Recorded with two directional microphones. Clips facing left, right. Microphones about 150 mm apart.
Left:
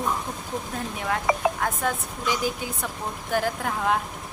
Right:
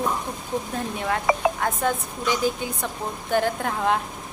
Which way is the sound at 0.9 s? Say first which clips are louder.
Right 1 dB; centre (ahead or behind).